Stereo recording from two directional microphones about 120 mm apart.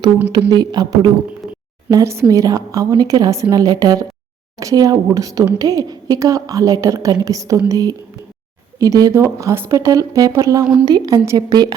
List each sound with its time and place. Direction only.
0.5 s speech: 35° right (ahead or behind)